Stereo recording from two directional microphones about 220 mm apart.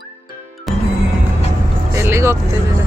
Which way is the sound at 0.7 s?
Centre (ahead or behind).